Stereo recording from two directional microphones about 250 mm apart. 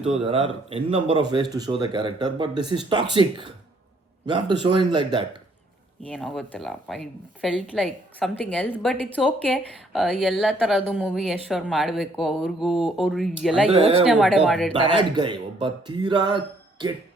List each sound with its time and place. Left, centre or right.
0.0 s a man's voice: right
6.1 s a woman's voice: centre
13.7 s a man's voice: right
14.0 s a woman's voice: centre
14.7 s speech: centre